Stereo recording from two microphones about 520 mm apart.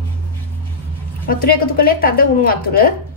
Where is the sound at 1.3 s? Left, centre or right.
Centre.